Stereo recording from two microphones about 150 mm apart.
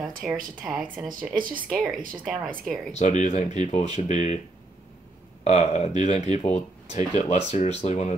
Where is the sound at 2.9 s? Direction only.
50° left (ahead or behind).